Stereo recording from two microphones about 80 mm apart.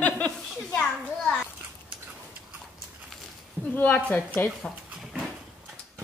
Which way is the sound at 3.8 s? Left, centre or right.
Left.